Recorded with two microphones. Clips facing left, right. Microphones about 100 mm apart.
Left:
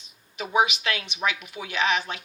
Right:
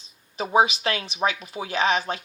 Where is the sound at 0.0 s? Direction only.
35° right (ahead or behind).